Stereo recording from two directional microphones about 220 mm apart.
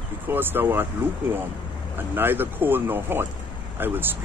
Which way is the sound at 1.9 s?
10° right (ahead or behind).